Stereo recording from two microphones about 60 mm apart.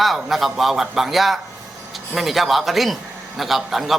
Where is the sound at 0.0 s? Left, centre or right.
Centre.